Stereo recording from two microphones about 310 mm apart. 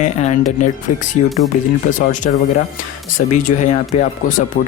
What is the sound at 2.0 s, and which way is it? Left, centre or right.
Speech, left.